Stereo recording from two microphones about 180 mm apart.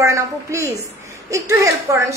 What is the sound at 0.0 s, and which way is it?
A woman's voice, 15° right (ahead or behind).